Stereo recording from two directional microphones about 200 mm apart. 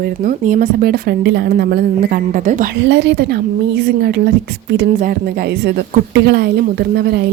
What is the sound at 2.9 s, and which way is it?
A woman's voice, 60° right (ahead or behind).